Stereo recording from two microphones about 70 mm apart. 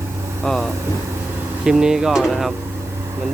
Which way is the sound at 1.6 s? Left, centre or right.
Centre.